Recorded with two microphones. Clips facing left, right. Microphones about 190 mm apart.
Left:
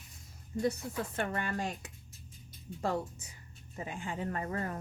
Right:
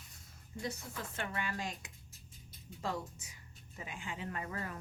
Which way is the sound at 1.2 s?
50° left (ahead or behind).